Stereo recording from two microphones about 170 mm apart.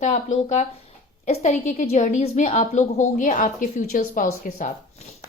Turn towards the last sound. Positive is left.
turn(degrees=60)  # may be behind; listen again after turning